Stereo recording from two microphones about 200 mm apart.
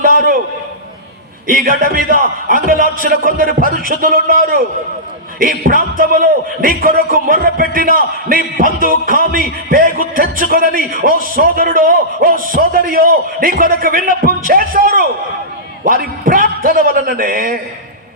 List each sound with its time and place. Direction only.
0.0 s a man's voice: 45° right (ahead or behind)
1.5 s speech: 45° right (ahead or behind)